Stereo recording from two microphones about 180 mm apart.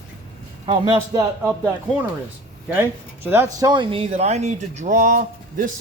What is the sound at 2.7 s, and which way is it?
A man's voice, 10° right (ahead or behind).